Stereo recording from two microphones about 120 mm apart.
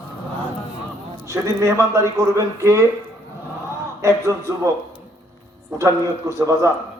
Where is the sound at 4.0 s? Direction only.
25° right (ahead or behind).